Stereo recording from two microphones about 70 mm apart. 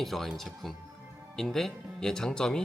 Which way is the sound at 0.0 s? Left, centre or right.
Centre.